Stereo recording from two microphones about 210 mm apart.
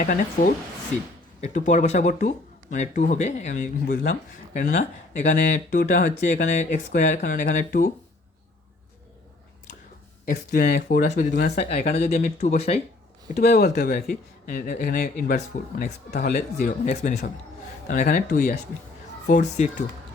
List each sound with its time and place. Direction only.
0.0 s speech: 40° left (ahead or behind)
10.2 s speech: 45° left (ahead or behind)
11.9 s speech: 30° left (ahead or behind)
13.6 s speech: 50° left (ahead or behind)